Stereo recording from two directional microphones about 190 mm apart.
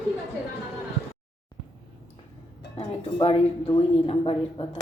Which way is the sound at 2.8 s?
30° left (ahead or behind).